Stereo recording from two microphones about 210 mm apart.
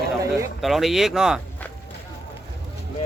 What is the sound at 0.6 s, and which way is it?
Speech, centre (ahead or behind).